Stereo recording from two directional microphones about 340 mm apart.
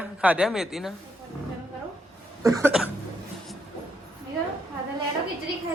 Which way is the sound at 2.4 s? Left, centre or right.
Centre.